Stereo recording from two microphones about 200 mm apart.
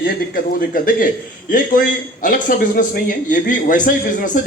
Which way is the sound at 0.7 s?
45° left (ahead or behind).